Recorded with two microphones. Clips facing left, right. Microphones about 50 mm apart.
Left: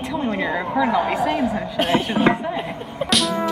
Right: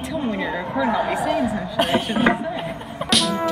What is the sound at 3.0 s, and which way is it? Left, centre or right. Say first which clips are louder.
Music: even; centre.